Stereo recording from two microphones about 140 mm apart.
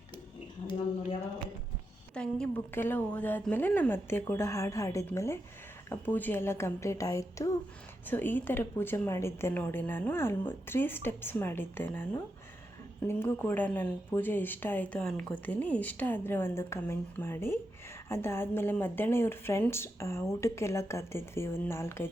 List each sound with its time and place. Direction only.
2.1 s a woman's voice: 5° left (ahead or behind); by 7.5 s 25° left (ahead or behind)
8.0 s speech: 15° left (ahead or behind)